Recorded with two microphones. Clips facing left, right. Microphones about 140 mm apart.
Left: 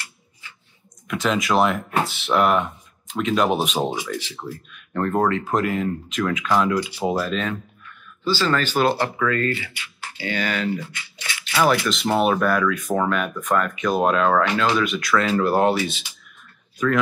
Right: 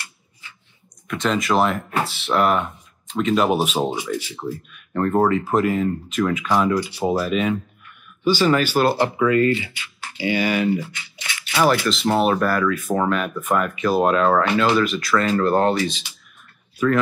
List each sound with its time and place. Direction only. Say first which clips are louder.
1.0 s speech: right 1 dB; centre (ahead or behind)
11.9 s speech: right 1 dB; centre (ahead or behind)
16.7 s speech: right 2 dB; 10° right (ahead or behind)